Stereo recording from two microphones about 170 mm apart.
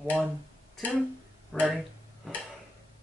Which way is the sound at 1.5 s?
10° left (ahead or behind).